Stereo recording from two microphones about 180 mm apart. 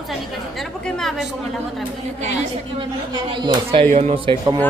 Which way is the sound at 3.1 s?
25° right (ahead or behind).